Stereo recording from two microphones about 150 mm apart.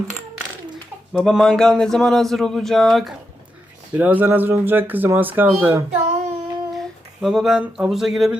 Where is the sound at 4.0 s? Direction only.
10° right (ahead or behind).